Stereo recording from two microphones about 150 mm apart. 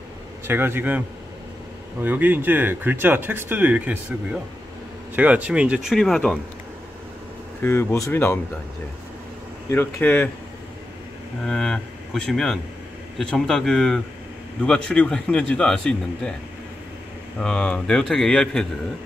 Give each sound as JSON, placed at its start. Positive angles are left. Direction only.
{"t": 0.5, "sound": "speech", "side_deg": -15}
{"t": 7.6, "sound": "speech", "side_deg": 15}
{"t": 9.7, "sound": "speech", "side_deg": 15}
{"t": 11.4, "sound": "speech", "side_deg": 5}
{"t": 17.4, "sound": "speech", "side_deg": 5}